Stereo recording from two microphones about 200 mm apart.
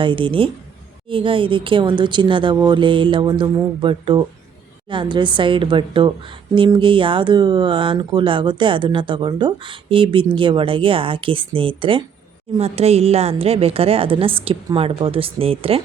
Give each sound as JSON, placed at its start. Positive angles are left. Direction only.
{"t": 0.0, "sound": "a woman's voice", "side_deg": -25}